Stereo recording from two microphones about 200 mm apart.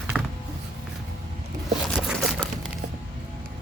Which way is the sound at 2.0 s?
Centre (ahead or behind).